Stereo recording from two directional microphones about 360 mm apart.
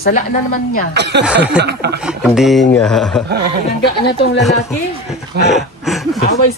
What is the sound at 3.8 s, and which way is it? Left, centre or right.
Speech, left.